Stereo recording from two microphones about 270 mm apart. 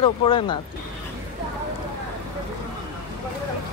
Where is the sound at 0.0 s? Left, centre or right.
Centre.